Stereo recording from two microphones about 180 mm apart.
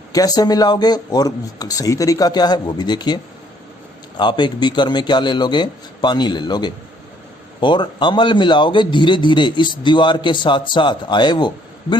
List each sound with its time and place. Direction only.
0.1 s speech: 20° left (ahead or behind)
4.2 s speech: 25° left (ahead or behind)